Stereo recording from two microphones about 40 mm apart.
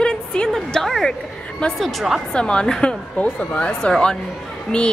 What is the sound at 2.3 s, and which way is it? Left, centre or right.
Speech, left.